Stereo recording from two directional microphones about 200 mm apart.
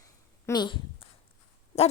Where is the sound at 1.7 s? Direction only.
30° left (ahead or behind).